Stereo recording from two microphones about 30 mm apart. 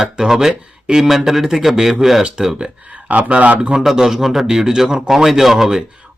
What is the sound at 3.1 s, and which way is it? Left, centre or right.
Speech, right.